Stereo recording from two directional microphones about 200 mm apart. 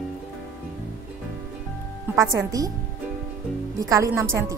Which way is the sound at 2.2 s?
15° right (ahead or behind).